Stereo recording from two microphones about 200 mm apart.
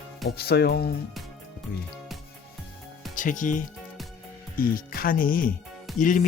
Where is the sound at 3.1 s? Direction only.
40° left (ahead or behind).